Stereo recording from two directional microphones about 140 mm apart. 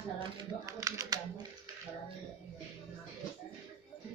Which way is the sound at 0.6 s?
25° right (ahead or behind).